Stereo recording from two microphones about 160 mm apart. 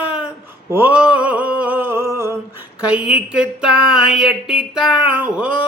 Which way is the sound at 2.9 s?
5° right (ahead or behind).